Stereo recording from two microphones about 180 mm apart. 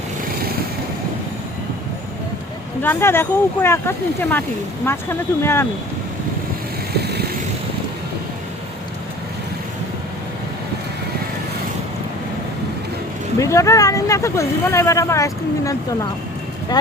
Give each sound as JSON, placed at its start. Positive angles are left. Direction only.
{"t": 2.8, "sound": "speech", "side_deg": 10}
{"t": 6.9, "sound": "vehicle", "side_deg": -65}
{"t": 13.4, "sound": "speech", "side_deg": 15}